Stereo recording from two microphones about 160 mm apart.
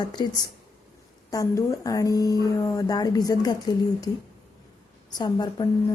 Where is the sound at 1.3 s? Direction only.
20° left (ahead or behind).